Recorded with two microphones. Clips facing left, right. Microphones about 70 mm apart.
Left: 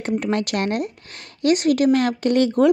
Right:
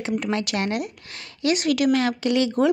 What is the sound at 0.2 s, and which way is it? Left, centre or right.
A woman's voice, left.